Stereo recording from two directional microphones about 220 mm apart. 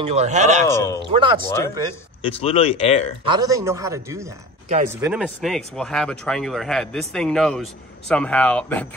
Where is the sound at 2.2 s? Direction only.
25° left (ahead or behind).